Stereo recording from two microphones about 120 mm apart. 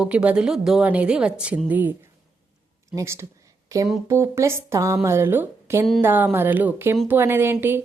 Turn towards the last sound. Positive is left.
turn(degrees=-20)  # may be behind; listen again after turning